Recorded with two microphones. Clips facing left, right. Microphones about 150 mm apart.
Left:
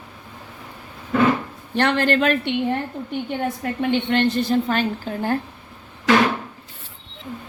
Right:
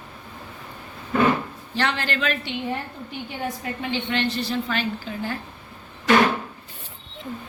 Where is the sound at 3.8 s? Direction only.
55° left (ahead or behind).